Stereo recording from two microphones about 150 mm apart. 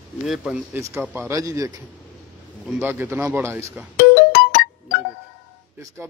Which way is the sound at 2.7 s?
15° right (ahead or behind).